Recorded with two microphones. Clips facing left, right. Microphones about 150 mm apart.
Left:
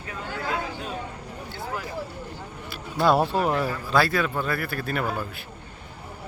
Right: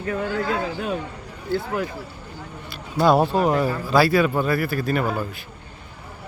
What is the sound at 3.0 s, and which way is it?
A man's voice, centre (ahead or behind).